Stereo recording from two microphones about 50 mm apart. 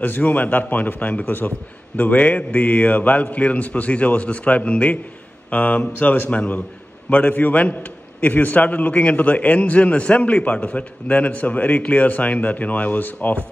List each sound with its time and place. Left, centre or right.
0.0 s a man's voice: left
6.3 s a man's voice: left